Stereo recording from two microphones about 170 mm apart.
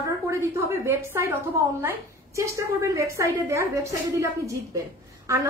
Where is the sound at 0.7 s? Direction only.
15° right (ahead or behind).